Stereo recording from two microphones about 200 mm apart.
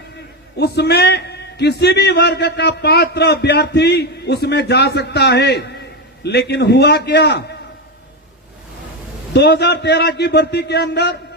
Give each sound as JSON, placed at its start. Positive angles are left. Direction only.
{"t": 0.5, "sound": "a man's voice", "side_deg": 55}
{"t": 9.3, "sound": "a man's voice", "side_deg": 60}